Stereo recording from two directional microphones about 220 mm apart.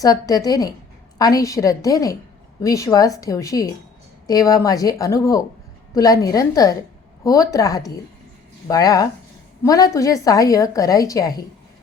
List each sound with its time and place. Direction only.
0.0 s a woman's voice: 15° left (ahead or behind)